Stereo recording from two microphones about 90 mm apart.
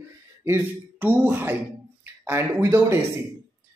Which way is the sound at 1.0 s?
25° right (ahead or behind).